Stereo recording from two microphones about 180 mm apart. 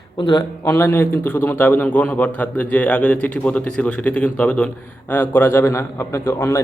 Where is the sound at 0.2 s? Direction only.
25° left (ahead or behind).